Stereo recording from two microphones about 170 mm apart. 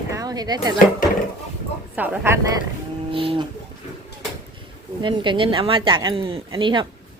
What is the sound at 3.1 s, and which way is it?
Speech, 30° right (ahead or behind).